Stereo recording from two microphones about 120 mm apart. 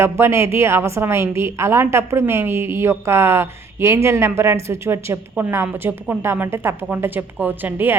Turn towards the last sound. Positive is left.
turn(degrees=-15)  # may be behind; listen again after turning